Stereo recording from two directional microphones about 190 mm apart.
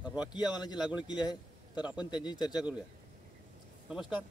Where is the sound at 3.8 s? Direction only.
5° right (ahead or behind).